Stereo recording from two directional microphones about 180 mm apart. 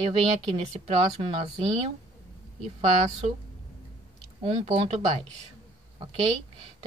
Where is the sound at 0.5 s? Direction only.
35° right (ahead or behind).